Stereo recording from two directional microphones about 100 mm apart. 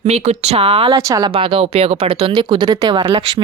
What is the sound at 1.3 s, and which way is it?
Speech, 65° right (ahead or behind).